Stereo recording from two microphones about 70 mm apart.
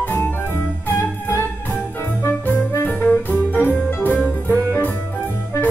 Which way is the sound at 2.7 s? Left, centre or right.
Left.